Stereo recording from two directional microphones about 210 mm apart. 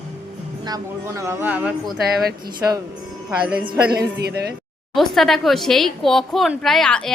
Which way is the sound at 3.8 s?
50° right (ahead or behind).